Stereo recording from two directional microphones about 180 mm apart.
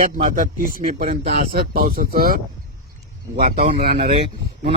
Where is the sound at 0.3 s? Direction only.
50° right (ahead or behind).